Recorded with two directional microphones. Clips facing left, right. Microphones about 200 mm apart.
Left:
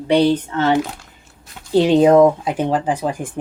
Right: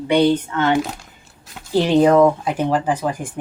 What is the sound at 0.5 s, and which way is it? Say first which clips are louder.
Speech: left 1 dB; 35° left (ahead or behind).